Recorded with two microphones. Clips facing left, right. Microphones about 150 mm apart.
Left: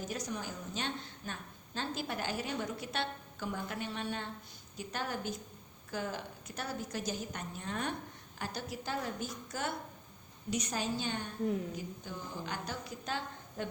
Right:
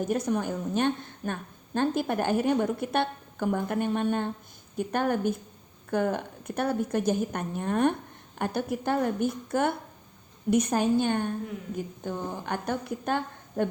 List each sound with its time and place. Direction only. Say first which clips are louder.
0.0 s a woman's voice: right 12 dB; 55° right (ahead or behind)